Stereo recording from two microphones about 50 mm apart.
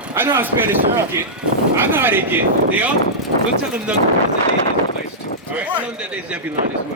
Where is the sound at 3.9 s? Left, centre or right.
Centre.